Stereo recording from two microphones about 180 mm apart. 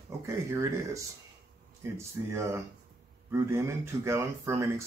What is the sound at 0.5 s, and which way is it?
Speech, 15° right (ahead or behind).